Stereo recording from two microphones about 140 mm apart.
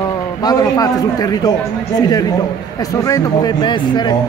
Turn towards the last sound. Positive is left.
turn(degrees=30)  # may be behind; listen again after turning